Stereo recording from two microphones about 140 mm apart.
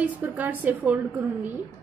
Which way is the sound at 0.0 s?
10° right (ahead or behind).